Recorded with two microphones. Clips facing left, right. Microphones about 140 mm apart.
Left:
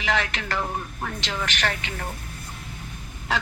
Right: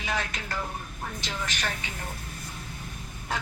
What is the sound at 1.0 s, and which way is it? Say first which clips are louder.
A man's voice: left 3 dB; 80° left.